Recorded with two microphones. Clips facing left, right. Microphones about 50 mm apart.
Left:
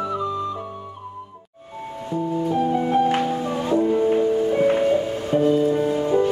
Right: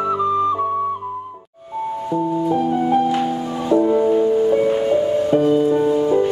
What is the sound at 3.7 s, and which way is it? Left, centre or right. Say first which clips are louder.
Music: right 5 dB; right.